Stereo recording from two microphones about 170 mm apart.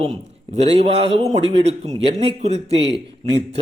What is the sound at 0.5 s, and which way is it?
Speech, 40° right (ahead or behind).